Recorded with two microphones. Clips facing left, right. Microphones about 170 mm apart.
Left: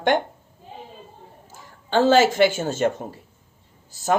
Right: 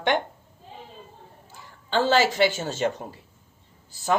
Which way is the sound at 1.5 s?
45° left (ahead or behind).